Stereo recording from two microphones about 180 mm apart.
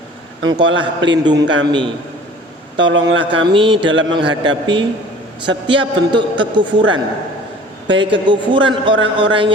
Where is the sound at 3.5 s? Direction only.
30° right (ahead or behind).